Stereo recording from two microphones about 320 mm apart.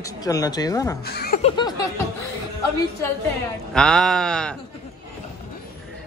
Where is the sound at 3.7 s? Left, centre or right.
Centre.